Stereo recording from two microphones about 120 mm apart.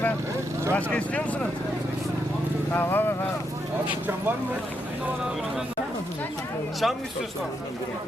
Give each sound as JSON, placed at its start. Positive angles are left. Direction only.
{"t": 0.7, "sound": "speech", "side_deg": 10}
{"t": 2.7, "sound": "speech", "side_deg": 15}
{"t": 6.8, "sound": "speech", "side_deg": 0}